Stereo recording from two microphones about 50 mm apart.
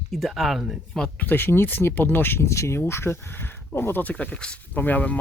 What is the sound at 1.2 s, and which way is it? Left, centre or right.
Speech, left.